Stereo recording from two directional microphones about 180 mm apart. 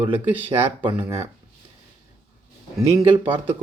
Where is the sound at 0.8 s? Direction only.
25° right (ahead or behind).